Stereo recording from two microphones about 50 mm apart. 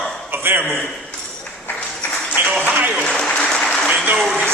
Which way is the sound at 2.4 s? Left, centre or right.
Right.